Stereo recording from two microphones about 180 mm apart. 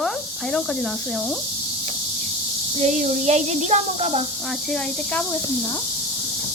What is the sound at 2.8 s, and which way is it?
Speech, 40° right (ahead or behind).